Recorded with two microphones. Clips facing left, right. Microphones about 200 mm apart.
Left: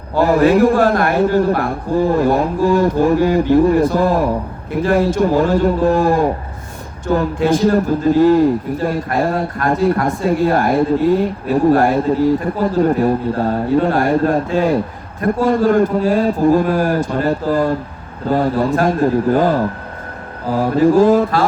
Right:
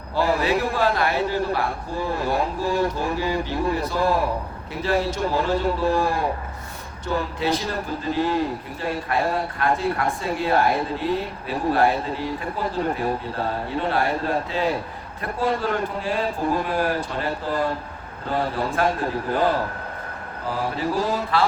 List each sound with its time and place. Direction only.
0.2 s a man's voice: 50° left (ahead or behind)
20.7 s a man's voice: 50° left (ahead or behind)